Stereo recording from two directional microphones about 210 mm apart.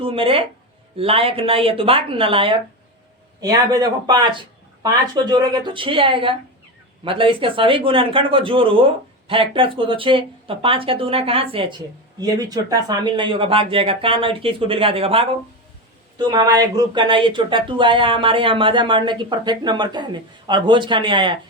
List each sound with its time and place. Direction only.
0.0 s speech: 25° right (ahead or behind)